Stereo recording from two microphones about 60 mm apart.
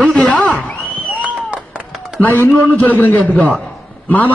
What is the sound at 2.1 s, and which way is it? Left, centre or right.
A man's voice, left.